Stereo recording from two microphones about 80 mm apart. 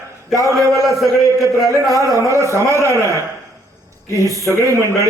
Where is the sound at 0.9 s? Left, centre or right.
Centre.